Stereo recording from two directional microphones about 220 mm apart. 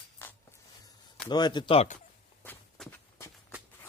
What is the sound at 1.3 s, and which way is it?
Speech, 20° left (ahead or behind).